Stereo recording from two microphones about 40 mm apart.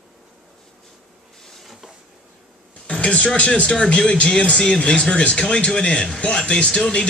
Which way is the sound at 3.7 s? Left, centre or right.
Centre.